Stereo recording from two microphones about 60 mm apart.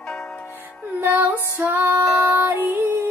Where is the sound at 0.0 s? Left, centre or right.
Centre.